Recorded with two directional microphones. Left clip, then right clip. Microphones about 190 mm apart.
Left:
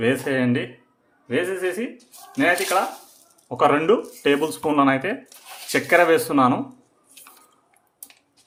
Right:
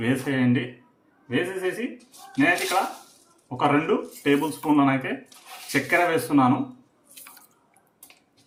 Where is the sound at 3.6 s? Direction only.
45° left (ahead or behind).